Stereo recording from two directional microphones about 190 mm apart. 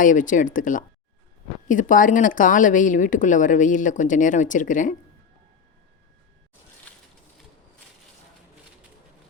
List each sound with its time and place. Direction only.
0.0 s speech: 45° left (ahead or behind)